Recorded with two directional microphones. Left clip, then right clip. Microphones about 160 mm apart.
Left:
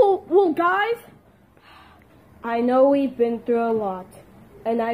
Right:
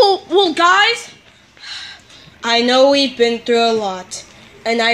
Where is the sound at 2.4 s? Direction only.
20° right (ahead or behind).